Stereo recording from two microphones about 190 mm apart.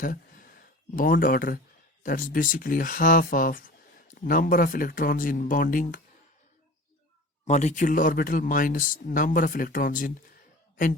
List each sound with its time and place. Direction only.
0.0 s a sound: 45° left (ahead or behind)
2.0 s speech: 45° left (ahead or behind)
7.4 s speech: 40° left (ahead or behind)